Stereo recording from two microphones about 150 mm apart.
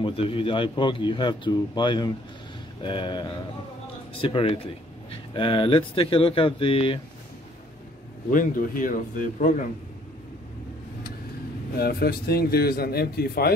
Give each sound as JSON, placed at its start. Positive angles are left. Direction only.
{"t": 0.0, "sound": "speech", "side_deg": 35}
{"t": 8.3, "sound": "speech", "side_deg": 65}
{"t": 11.7, "sound": "a man's voice", "side_deg": 90}